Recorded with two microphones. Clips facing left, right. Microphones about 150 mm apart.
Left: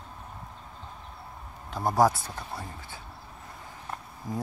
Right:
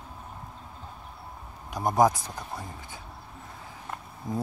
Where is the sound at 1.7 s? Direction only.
15° right (ahead or behind).